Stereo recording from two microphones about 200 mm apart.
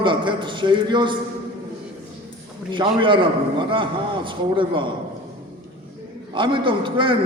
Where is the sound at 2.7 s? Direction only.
25° right (ahead or behind).